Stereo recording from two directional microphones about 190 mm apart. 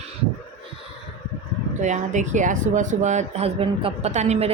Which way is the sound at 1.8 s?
40° right (ahead or behind).